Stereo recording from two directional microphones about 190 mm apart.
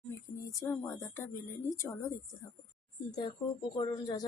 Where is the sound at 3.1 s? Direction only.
20° left (ahead or behind).